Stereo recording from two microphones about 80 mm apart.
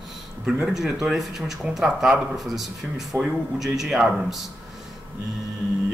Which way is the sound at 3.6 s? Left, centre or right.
Centre.